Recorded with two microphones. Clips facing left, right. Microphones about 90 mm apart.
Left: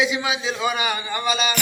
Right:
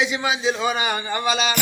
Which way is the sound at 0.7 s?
35° right (ahead or behind).